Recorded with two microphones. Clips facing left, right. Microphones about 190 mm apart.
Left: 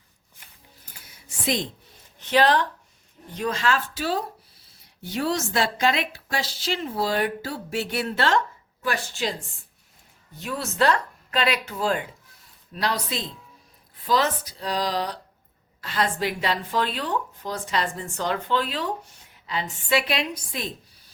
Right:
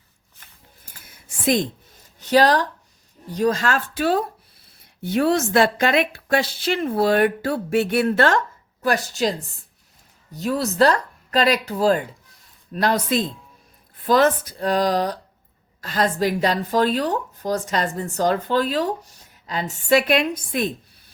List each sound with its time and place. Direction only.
2.1 s speech: 40° right (ahead or behind)
8.8 s speech: 40° right (ahead or behind)
10.3 s speech: 40° right (ahead or behind)
12.7 s speech: 50° right (ahead or behind)